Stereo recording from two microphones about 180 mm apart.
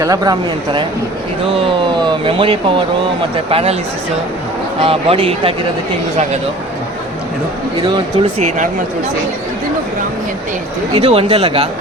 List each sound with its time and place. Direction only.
0.0 s speech: 20° right (ahead or behind); by 3.8 s 35° right (ahead or behind)
4.8 s speech: 30° right (ahead or behind)
7.8 s speech: 30° right (ahead or behind)
11.0 s speech: 30° right (ahead or behind)